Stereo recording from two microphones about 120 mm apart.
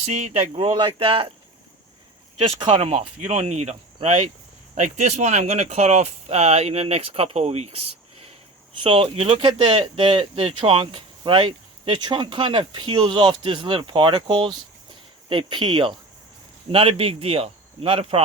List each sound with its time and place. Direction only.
0.0 s speech: 70° right (ahead or behind)
0.7 s speech: 45° right (ahead or behind)
2.6 s speech: 45° right (ahead or behind)
8.8 s speech: 45° right (ahead or behind)
9.6 s speech: 40° right (ahead or behind)
16.7 s speech: 50° right (ahead or behind)